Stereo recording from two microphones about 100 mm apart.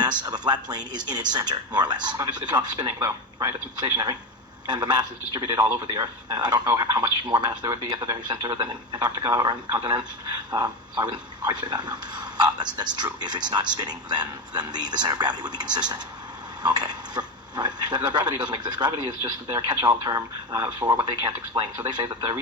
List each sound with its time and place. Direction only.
0.0 s speech: 50° right (ahead or behind)